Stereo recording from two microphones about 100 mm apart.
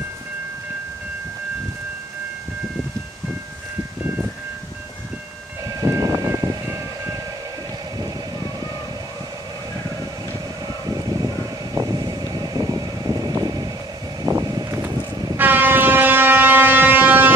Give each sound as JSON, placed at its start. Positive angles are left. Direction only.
{"t": 5.7, "sound": "vehicle", "side_deg": -35}
{"t": 8.0, "sound": "a sound", "side_deg": -40}
{"t": 10.7, "sound": "vehicle", "side_deg": -40}
{"t": 14.2, "sound": "a sound", "side_deg": -40}
{"t": 14.8, "sound": "vehicle", "side_deg": -40}
{"t": 15.3, "sound": "train", "side_deg": -20}